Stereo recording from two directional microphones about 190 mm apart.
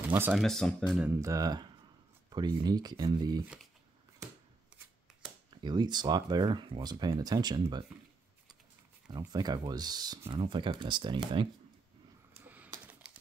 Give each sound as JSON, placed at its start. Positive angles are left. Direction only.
{"t": 0.1, "sound": "speech", "side_deg": -10}
{"t": 0.4, "sound": "speech", "side_deg": 0}
{"t": 1.0, "sound": "speech", "side_deg": -15}
{"t": 5.5, "sound": "speech", "side_deg": -25}
{"t": 9.3, "sound": "speech", "side_deg": -20}
{"t": 12.4, "sound": "a sound", "side_deg": -10}